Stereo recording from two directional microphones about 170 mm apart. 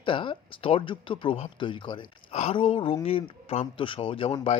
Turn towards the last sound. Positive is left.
turn(degrees=35)  # may be behind; listen again after turning